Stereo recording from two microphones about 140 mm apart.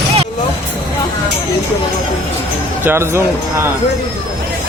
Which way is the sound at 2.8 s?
20° right (ahead or behind).